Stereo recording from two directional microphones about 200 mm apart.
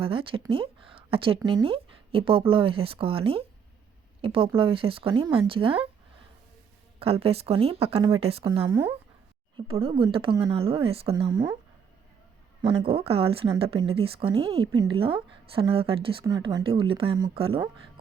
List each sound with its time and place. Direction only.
0.0 s speech: 25° right (ahead or behind)
7.0 s speech: 30° right (ahead or behind)
9.8 s speech: 25° right (ahead or behind)
12.9 s speech: 30° right (ahead or behind)